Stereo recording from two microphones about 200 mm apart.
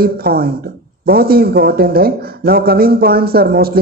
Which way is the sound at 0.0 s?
50° right (ahead or behind).